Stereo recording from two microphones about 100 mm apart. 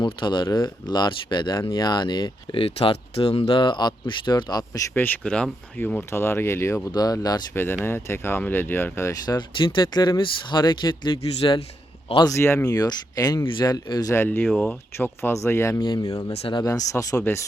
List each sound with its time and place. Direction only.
0.0 s speech: 50° left (ahead or behind); by 3.6 s 75° left (ahead or behind)
3.6 s speech: 50° left (ahead or behind)
4.9 s speech: 20° left (ahead or behind)
6.9 s speech: 40° left (ahead or behind)
7.5 s speech: 25° left (ahead or behind)
9.2 s speech: 45° left (ahead or behind)
9.6 s speech: 55° left (ahead or behind)
12.2 s speech: 30° left (ahead or behind)
12.6 s speech: 40° left (ahead or behind)
14.6 s speech: 20° left (ahead or behind)
15.8 s speech: 45° left (ahead or behind)